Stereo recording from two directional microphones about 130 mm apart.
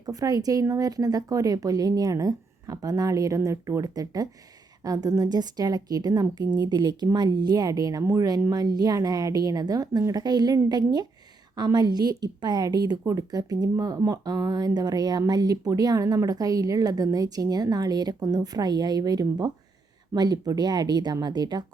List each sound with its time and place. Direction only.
0.0 s a woman's voice: 30° right (ahead or behind)